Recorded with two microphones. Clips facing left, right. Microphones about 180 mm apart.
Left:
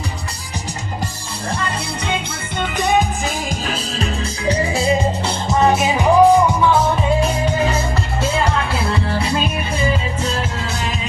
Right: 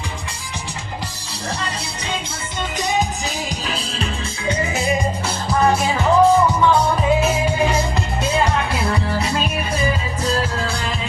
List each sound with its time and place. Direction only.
1.5 s music: 55° left (ahead or behind)
4.4 s music: 30° left (ahead or behind); by 6.7 s 15° left (ahead or behind)
6.7 s music: 5° right (ahead or behind)